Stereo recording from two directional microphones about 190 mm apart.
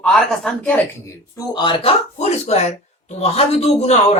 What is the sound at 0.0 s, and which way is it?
Speech, centre (ahead or behind).